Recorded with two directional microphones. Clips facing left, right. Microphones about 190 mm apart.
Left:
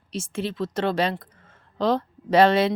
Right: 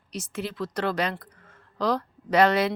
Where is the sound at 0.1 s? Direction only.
25° left (ahead or behind).